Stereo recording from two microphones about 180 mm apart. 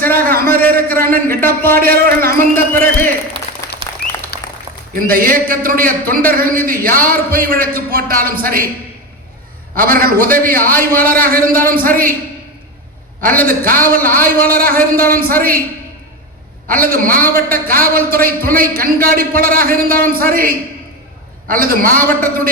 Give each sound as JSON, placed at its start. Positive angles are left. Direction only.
{"t": 0.0, "sound": "a sound", "side_deg": -55}
{"t": 1.8, "sound": "speech", "side_deg": -55}
{"t": 3.6, "sound": "applause", "side_deg": 15}
{"t": 4.0, "sound": "a sound", "side_deg": 65}
{"t": 4.9, "sound": "a man's voice", "side_deg": -55}
{"t": 9.7, "sound": "a man's voice", "side_deg": -55}
{"t": 13.4, "sound": "a man's voice", "side_deg": -55}
{"t": 16.6, "sound": "a man's voice", "side_deg": -55}